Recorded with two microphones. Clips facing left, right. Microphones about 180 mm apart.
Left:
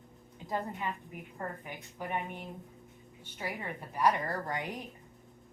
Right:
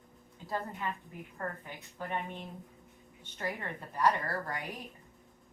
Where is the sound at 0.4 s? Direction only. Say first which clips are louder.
Left 1 dB; 20° left (ahead or behind).